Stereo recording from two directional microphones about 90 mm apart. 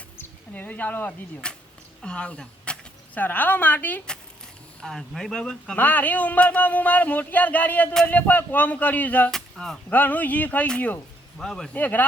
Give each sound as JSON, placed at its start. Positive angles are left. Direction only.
{"t": 0.2, "sound": "a woman's voice", "side_deg": 20}
{"t": 4.8, "sound": "speech", "side_deg": 5}
{"t": 5.7, "sound": "speech", "side_deg": 20}
{"t": 9.3, "sound": "speech", "side_deg": 5}
{"t": 9.9, "sound": "speech", "side_deg": 20}
{"t": 11.3, "sound": "speech", "side_deg": 5}
{"t": 11.7, "sound": "speech", "side_deg": 20}